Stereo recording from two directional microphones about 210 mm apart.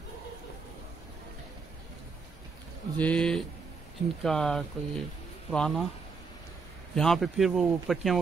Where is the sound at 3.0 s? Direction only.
5° left (ahead or behind).